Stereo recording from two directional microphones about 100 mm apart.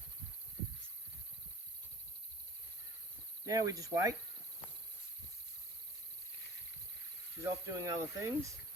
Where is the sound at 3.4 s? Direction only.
35° right (ahead or behind).